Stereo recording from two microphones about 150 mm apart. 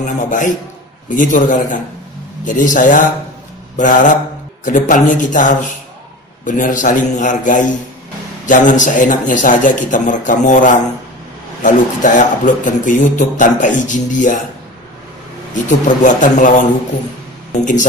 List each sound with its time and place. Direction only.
0.0 s speech: 60° left (ahead or behind)
15.5 s speech: 60° left (ahead or behind)